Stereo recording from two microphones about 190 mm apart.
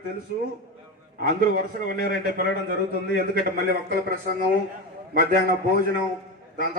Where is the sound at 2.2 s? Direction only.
50° right (ahead or behind).